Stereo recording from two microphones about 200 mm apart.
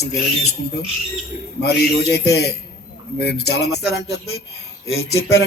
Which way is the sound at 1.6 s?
55° left (ahead or behind).